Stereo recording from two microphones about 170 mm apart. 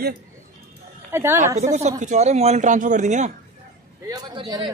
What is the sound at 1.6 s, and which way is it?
Speech, 40° right (ahead or behind).